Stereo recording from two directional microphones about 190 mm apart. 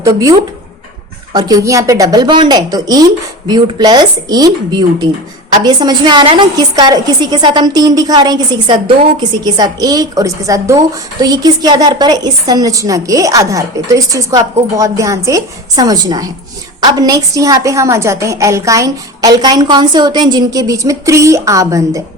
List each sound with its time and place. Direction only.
0.0 s a woman's voice: 15° right (ahead or behind)
5.6 s a woman's voice: 20° right (ahead or behind)